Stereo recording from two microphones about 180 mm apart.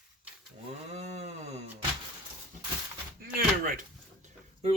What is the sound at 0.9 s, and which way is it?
Speech, 35° right (ahead or behind).